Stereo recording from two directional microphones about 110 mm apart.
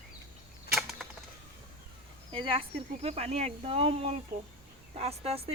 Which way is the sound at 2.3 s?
55° right (ahead or behind).